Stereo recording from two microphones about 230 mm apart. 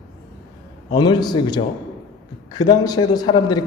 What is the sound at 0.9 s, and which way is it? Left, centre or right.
A man's voice, centre.